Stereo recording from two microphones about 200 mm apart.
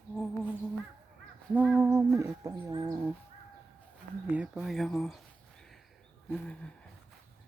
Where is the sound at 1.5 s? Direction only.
10° right (ahead or behind).